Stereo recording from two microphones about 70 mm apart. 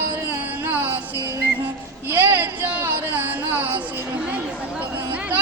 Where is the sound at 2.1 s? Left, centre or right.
Right.